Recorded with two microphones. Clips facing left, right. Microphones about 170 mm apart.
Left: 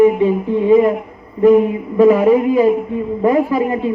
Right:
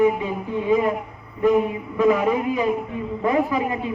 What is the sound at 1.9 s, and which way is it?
A man's voice, 40° left (ahead or behind).